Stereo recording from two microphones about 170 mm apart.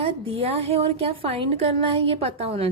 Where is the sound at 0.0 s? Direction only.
35° right (ahead or behind).